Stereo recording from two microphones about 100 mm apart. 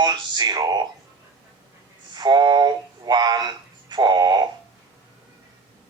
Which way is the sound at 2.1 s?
45° right (ahead or behind).